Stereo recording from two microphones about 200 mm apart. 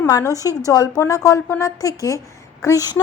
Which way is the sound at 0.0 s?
15° left (ahead or behind).